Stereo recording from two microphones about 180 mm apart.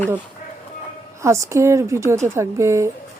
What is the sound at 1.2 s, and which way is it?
Speech, 15° right (ahead or behind).